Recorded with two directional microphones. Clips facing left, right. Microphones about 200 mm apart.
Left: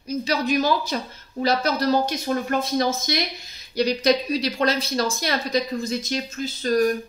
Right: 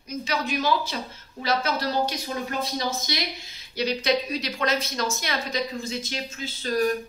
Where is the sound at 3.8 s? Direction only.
40° left (ahead or behind).